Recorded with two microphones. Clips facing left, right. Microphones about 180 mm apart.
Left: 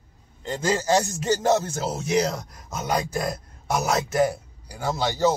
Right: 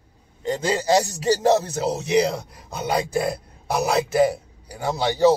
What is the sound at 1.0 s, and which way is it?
Speech, 35° right (ahead or behind).